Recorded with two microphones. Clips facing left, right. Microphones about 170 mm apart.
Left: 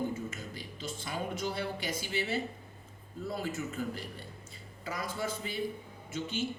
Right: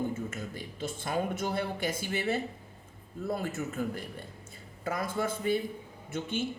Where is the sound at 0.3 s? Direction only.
55° right (ahead or behind).